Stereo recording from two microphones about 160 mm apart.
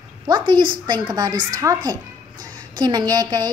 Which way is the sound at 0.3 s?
30° right (ahead or behind).